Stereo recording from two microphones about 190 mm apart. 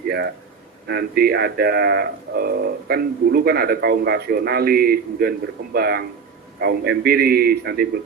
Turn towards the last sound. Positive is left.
turn(degrees=-55)  # may be behind; listen again after turning